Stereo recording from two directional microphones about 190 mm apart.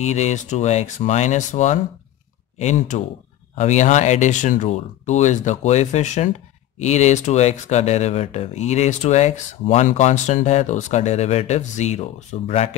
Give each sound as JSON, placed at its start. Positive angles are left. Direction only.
{"t": 0.0, "sound": "speech", "side_deg": 35}